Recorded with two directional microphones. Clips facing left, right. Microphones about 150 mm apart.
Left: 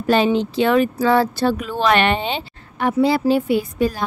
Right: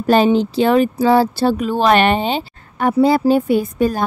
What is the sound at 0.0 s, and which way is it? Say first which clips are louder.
Speech: right 3 dB; 40° right (ahead or behind).